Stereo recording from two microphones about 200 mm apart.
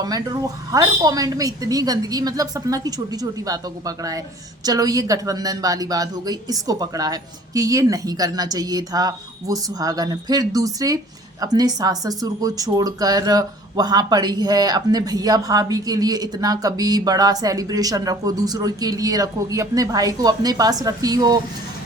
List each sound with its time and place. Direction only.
0.0 s speech: 20° right (ahead or behind)